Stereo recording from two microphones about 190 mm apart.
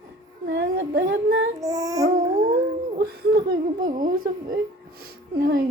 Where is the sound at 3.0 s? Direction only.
50° right (ahead or behind).